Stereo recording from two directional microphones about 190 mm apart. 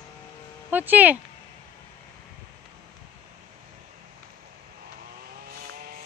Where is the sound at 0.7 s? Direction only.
10° right (ahead or behind).